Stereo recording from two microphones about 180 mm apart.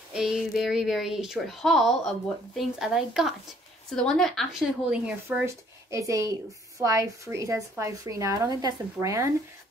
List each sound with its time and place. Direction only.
0.1 s speech: 5° right (ahead or behind)